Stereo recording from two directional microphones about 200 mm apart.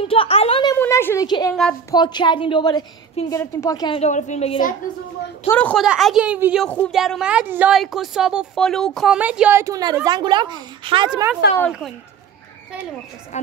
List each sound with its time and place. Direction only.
0.0 s speech: 30° left (ahead or behind)
0.7 s a woman's voice: 10° left (ahead or behind); by 4.7 s 35° left (ahead or behind)
5.5 s a woman's voice: 5° left (ahead or behind); by 11.2 s 20° right (ahead or behind)